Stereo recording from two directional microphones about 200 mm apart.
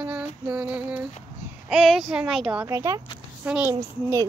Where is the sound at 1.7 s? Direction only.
Centre (ahead or behind).